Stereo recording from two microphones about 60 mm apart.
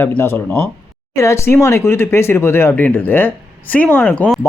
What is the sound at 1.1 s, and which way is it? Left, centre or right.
Speech, left.